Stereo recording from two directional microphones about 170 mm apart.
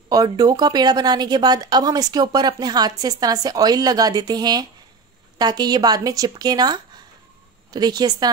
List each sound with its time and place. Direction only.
0.1 s a woman's voice: 20° right (ahead or behind)